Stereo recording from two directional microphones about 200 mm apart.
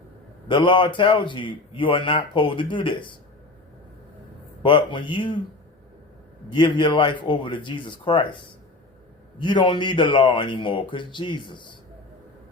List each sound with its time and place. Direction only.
0.4 s a man's voice: 25° left (ahead or behind)
4.6 s a man's voice: 25° left (ahead or behind)
6.5 s a man's voice: 25° left (ahead or behind)
9.4 s a man's voice: 25° left (ahead or behind)